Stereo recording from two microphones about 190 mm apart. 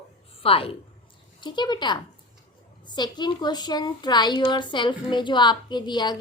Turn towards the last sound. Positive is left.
turn(degrees=20)  # may be behind; listen again after turning